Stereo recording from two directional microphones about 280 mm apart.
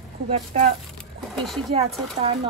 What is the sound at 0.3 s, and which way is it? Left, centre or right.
Speech, right.